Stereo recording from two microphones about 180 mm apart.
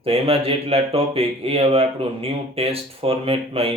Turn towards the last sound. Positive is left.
turn(degrees=-30)  # may be behind; listen again after turning